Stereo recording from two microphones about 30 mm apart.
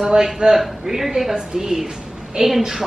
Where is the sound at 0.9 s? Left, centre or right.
Centre.